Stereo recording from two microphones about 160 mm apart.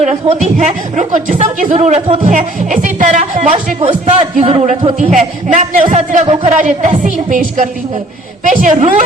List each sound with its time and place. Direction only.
0.0 s speech: 45° right (ahead or behind)
2.2 s a man's voice: 50° right (ahead or behind); by 4.9 s 35° right (ahead or behind)
4.9 s speech: 50° right (ahead or behind)
6.2 s a man's voice: 35° right (ahead or behind)
6.6 s a woman's voice: 50° right (ahead or behind)